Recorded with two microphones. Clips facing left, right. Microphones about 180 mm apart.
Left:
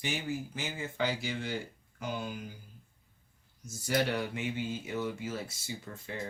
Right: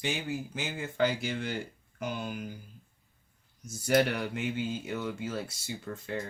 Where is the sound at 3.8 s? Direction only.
60° right (ahead or behind).